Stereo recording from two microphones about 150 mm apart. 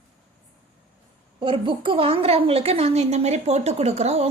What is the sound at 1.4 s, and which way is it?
A woman's voice, 35° right (ahead or behind).